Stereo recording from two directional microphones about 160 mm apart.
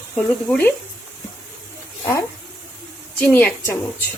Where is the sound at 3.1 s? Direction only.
10° left (ahead or behind).